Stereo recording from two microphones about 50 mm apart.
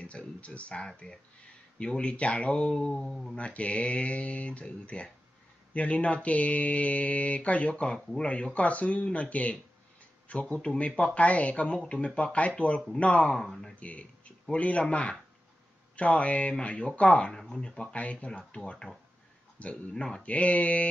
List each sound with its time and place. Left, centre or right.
0.4 s mantra: left
7.9 s mantra: centre
10.2 s speech: left
10.8 s mantra: left
13.4 s speech: centre
13.7 s speech: left
16.0 s mantra: left
17.4 s speech: centre
18.0 s mantra: left